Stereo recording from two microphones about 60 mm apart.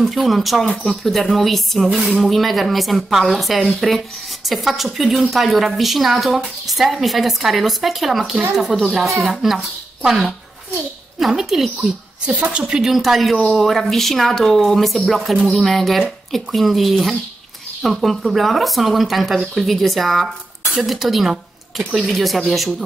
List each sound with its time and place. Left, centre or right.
0.0 s speech: centre
12.3 s a woman's voice: centre
12.9 s speech: centre